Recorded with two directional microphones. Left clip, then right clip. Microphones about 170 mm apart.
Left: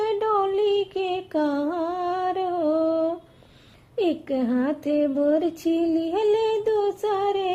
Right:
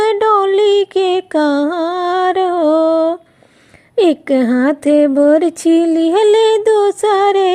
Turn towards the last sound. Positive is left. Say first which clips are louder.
# right 12 dB
turn(degrees=-45)  # may be behind; listen again after turning